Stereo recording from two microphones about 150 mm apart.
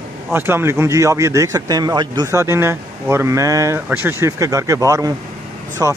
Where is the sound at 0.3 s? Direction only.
15° right (ahead or behind).